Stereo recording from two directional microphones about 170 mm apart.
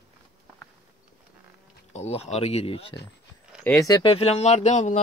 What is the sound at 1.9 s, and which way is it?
Speech, 40° left (ahead or behind).